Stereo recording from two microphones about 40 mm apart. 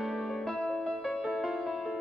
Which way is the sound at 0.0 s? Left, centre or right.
Centre.